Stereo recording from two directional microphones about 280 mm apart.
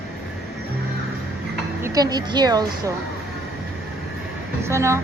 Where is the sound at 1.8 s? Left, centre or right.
Centre.